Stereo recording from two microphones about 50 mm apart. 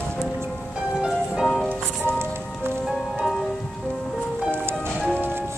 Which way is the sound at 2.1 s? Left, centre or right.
Right.